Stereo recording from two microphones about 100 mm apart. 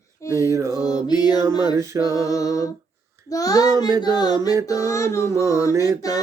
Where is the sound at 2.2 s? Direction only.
35° left (ahead or behind).